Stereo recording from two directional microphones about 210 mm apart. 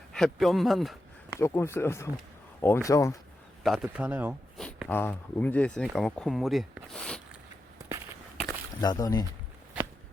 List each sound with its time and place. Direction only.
0.1 s speech: centre (ahead or behind)
1.4 s speech: 15° left (ahead or behind)
3.6 s speech: centre (ahead or behind)
4.5 s speech: 5° left (ahead or behind)
8.4 s a sound: 15° left (ahead or behind)